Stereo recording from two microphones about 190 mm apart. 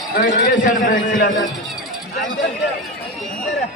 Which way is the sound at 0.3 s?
45° left (ahead or behind).